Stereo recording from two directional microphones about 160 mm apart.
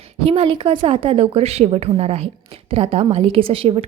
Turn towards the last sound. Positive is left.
turn(degrees=-35)  # may be behind; listen again after turning